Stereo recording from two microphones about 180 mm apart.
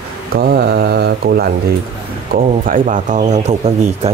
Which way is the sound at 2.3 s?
45° right (ahead or behind).